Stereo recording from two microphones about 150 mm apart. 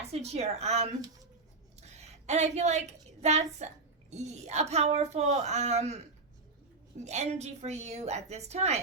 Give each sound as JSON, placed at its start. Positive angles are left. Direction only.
{"t": 0.1, "sound": "a woman's voice", "side_deg": -45}
{"t": 7.0, "sound": "speech", "side_deg": -50}